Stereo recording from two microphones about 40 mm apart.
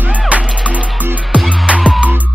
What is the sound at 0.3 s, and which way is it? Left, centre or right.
Music, right.